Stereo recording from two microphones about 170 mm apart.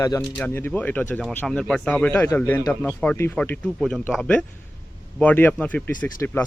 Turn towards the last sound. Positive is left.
turn(degrees=10)  # may be behind; listen again after turning